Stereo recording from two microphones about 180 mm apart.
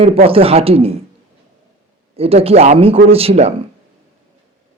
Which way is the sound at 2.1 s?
35° right (ahead or behind).